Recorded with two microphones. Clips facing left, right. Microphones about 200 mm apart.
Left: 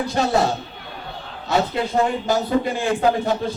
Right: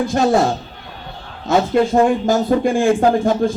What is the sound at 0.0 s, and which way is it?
Speech, 45° right (ahead or behind).